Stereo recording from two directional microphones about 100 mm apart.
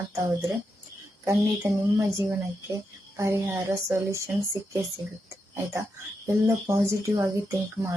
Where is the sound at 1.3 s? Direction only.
30° right (ahead or behind).